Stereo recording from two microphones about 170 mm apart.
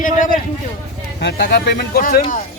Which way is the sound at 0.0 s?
50° left (ahead or behind).